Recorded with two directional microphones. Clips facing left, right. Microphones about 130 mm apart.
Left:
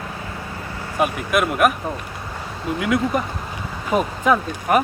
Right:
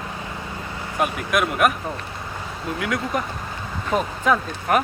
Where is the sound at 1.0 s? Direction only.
Centre (ahead or behind).